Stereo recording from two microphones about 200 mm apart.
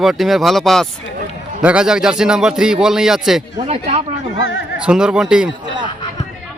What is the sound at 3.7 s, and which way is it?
Speech, 30° right (ahead or behind).